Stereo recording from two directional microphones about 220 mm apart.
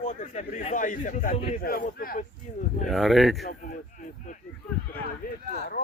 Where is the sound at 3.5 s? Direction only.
35° left (ahead or behind).